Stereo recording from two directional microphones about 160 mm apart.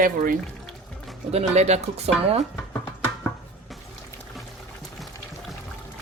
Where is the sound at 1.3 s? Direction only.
40° right (ahead or behind).